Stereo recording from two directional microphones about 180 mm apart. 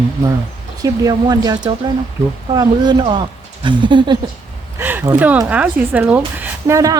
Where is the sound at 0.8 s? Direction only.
20° right (ahead or behind).